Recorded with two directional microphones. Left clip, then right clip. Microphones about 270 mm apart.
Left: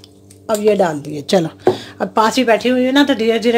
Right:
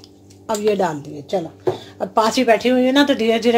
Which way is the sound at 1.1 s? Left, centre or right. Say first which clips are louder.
Left 7 dB; left.